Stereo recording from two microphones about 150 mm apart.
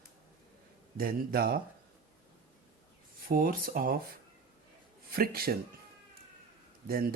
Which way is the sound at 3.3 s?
75° right (ahead or behind).